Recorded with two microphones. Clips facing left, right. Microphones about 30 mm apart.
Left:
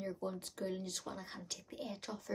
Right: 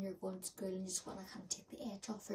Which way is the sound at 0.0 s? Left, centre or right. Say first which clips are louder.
Left 3 dB; left.